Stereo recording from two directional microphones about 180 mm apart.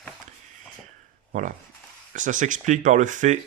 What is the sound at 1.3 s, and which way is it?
Speech, 45° right (ahead or behind).